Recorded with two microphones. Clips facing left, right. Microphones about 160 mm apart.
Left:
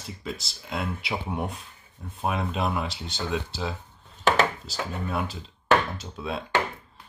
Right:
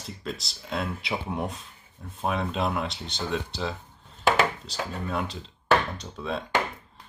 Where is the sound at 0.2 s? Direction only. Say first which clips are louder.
Even; centre (ahead or behind).